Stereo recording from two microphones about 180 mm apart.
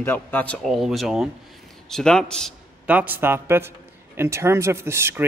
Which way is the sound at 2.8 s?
10° right (ahead or behind).